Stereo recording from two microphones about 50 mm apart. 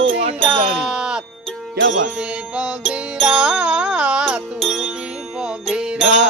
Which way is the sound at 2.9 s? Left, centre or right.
Right.